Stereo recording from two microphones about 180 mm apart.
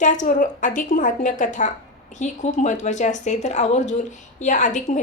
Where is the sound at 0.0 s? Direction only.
45° left (ahead or behind).